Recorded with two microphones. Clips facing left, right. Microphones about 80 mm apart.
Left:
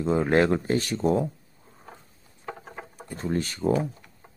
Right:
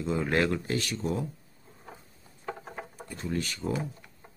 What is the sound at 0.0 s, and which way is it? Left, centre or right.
Speech, left.